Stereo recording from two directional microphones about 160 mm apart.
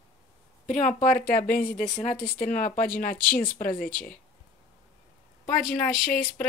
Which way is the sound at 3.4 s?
65° left (ahead or behind).